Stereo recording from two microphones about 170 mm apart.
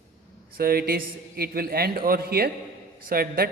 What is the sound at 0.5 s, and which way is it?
A man's voice, 60° right (ahead or behind).